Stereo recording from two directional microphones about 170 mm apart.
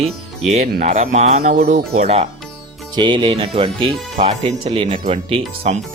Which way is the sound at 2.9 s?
30° right (ahead or behind).